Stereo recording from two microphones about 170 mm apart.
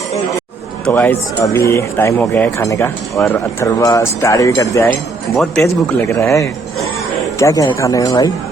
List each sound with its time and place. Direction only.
0.9 s speech: 10° left (ahead or behind)
5.4 s speech: centre (ahead or behind)
6.1 s speech: 15° left (ahead or behind)